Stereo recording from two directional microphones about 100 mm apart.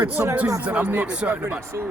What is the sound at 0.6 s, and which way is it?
Speech, 15° right (ahead or behind).